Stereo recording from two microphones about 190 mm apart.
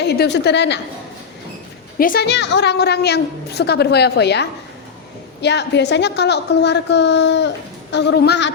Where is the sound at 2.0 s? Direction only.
50° left (ahead or behind).